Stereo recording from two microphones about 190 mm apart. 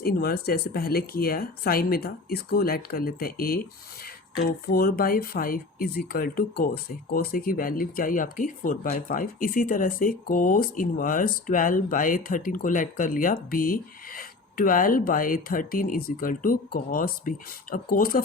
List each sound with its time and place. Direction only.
0.0 s speech: 50° left (ahead or behind)